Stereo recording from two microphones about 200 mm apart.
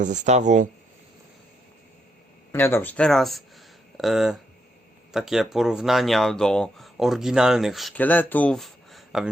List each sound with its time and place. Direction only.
0.0 s speech: 35° right (ahead or behind)
2.5 s speech: 10° left (ahead or behind)